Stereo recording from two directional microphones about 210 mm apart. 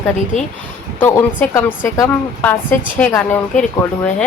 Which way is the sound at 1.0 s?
10° left (ahead or behind).